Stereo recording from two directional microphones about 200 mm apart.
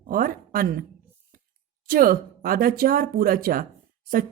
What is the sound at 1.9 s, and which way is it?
A woman's voice, 45° right (ahead or behind).